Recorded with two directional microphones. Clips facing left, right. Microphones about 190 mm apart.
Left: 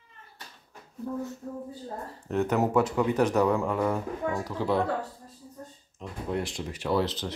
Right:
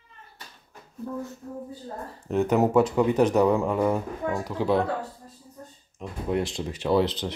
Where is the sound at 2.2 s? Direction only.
15° right (ahead or behind).